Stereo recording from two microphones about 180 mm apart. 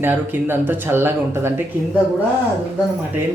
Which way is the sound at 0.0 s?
10° right (ahead or behind).